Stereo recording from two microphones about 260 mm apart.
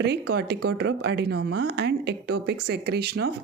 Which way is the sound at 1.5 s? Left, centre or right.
Right.